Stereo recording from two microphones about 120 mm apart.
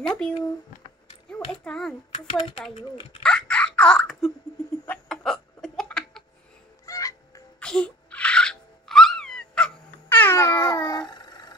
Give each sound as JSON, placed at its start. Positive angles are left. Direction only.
{"t": 0.0, "sound": "speech", "side_deg": 10}
{"t": 1.6, "sound": "speech", "side_deg": 5}
{"t": 3.2, "sound": "a sound", "side_deg": 5}
{"t": 4.8, "sound": "hiccup", "side_deg": 10}
{"t": 6.9, "sound": "fowl", "side_deg": 30}
{"t": 7.6, "sound": "music", "side_deg": 10}